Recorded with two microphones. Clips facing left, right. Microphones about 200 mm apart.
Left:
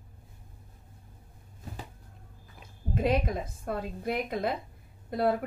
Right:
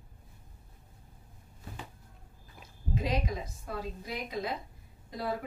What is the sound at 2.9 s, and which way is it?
A woman's voice, 55° left (ahead or behind).